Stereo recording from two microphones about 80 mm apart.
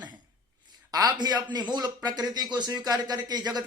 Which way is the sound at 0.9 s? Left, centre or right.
Right.